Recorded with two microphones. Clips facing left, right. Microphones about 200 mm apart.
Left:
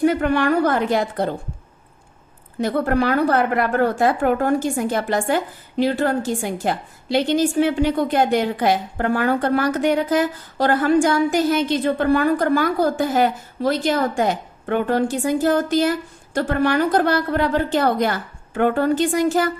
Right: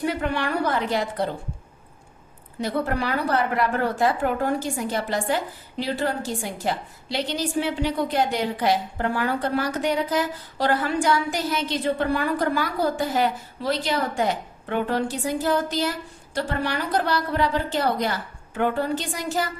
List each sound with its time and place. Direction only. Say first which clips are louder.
0.0 s a woman's voice: left 8 dB; 50° left (ahead or behind)
2.6 s a woman's voice: left 6 dB; 50° left (ahead or behind)